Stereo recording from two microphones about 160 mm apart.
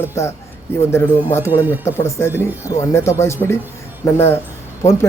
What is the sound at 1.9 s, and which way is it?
A man's voice, 15° left (ahead or behind).